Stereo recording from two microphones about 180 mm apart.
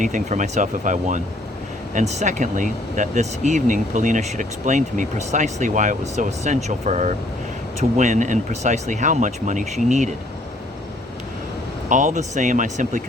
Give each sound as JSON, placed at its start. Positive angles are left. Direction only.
{"t": 0.0, "sound": "speech", "side_deg": -45}
{"t": 11.9, "sound": "speech", "side_deg": -45}